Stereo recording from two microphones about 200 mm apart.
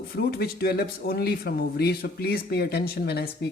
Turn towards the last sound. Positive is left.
turn(degrees=50)  # may be behind; listen again after turning